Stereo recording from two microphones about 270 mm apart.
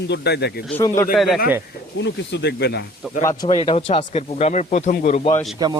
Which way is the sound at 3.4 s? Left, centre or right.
Centre.